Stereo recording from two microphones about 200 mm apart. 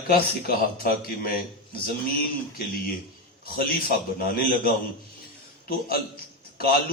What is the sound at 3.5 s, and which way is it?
A man's voice, 50° left (ahead or behind).